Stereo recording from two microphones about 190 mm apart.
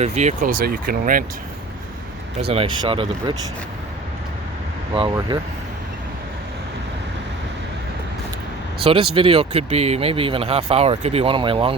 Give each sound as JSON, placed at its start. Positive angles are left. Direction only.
{"t": 0.0, "sound": "speech", "side_deg": -35}
{"t": 2.5, "sound": "speech", "side_deg": -30}
{"t": 4.9, "sound": "speech", "side_deg": -25}
{"t": 8.8, "sound": "speech", "side_deg": -30}